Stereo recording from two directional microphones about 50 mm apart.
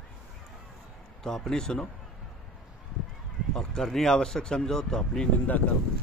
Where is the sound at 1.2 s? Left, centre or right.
Centre.